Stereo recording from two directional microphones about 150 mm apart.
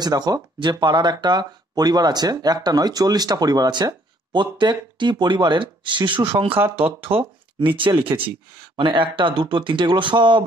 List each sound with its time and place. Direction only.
0.0 s speech: 25° right (ahead or behind)
7.0 s speech: 15° right (ahead or behind)
7.6 s speech: 35° right (ahead or behind)